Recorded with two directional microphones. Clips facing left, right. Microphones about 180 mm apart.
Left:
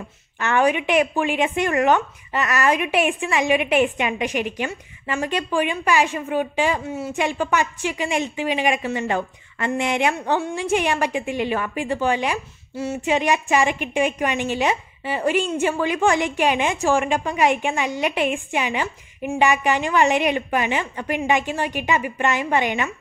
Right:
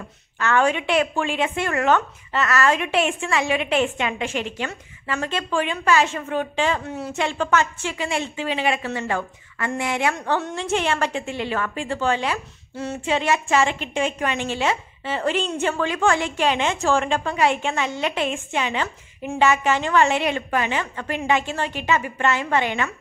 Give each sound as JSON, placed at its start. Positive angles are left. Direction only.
{"t": 0.4, "sound": "a woman's voice", "side_deg": 15}